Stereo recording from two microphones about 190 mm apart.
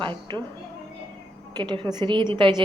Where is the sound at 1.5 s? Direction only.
25° right (ahead or behind).